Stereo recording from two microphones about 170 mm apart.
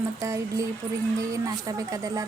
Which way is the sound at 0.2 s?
20° right (ahead or behind).